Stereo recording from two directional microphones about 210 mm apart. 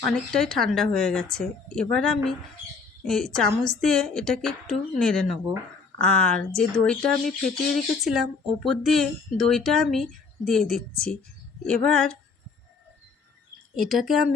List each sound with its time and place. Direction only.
0.3 s speech: centre (ahead or behind)
13.7 s speech: centre (ahead or behind)